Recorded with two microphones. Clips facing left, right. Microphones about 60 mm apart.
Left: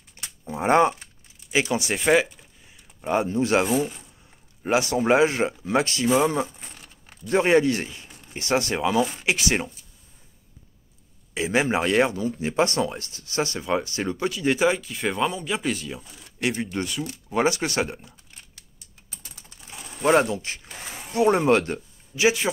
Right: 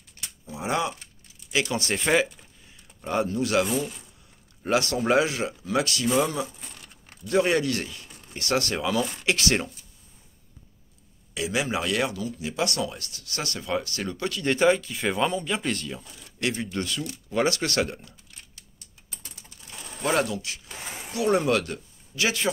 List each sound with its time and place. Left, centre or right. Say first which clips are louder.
0.2 s a sound: left 1 dB; left
0.5 s speech: left 8 dB; left
1.5 s speech: left 3 dB; centre
3.0 s speech: left 3 dB; left
4.6 s speech: left 3 dB; centre
11.3 s speech: left 5 dB; left; by 16.0 s centre
16.0 s speech: left 2 dB; centre
20.0 s speech: left 5 dB; left
22.1 s speech: left 5 dB; centre